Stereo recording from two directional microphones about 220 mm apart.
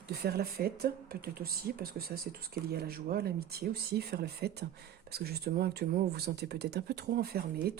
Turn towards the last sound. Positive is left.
turn(degrees=-45)  # may be behind; listen again after turning